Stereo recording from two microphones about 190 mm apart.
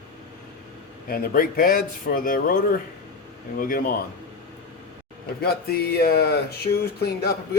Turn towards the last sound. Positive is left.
turn(degrees=55)  # may be behind; listen again after turning